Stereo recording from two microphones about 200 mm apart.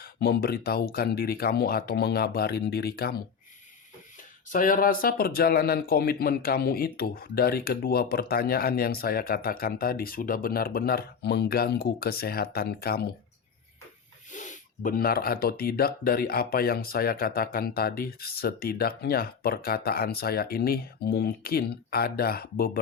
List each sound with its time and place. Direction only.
0.0 s speech: 50° left (ahead or behind)
4.5 s speech: 45° left (ahead or behind)
14.3 s speech: 40° left (ahead or behind)